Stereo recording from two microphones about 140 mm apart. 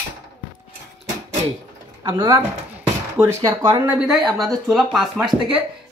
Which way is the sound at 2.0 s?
30° right (ahead or behind).